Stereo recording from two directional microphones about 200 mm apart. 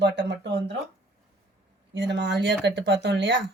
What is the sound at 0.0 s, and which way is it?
Speech, 60° right (ahead or behind).